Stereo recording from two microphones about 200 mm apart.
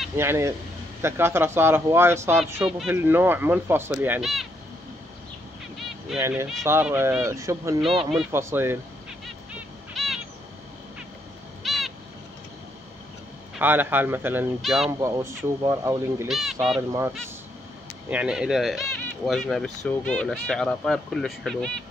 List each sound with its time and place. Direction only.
0.2 s speech: 15° right (ahead or behind)
5.8 s a sound: centre (ahead or behind)
6.6 s speech: 10° right (ahead or behind)
9.2 s bird: centre (ahead or behind)
11.6 s owl: centre (ahead or behind)
13.6 s speech: 10° right (ahead or behind)
14.9 s speech: 15° right (ahead or behind)
16.3 s speech: centre (ahead or behind)
18.1 s speech: 5° right (ahead or behind)